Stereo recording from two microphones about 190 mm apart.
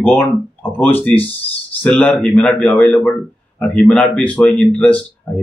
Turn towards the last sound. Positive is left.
turn(degrees=5)  # may be behind; listen again after turning